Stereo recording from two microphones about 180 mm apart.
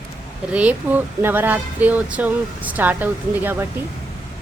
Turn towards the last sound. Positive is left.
turn(degrees=-10)  # may be behind; listen again after turning